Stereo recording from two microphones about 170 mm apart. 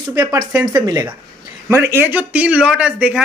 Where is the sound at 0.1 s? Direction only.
20° right (ahead or behind).